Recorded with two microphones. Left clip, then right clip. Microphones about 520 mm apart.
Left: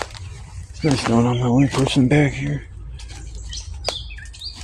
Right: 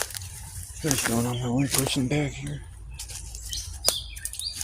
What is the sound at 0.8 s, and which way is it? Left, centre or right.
Speech, right.